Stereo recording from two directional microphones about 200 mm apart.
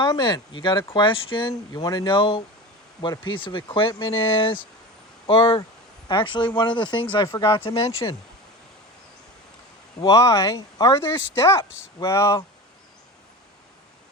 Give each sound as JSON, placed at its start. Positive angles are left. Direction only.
{"t": 0.0, "sound": "speech", "side_deg": 20}
{"t": 10.0, "sound": "speech", "side_deg": 15}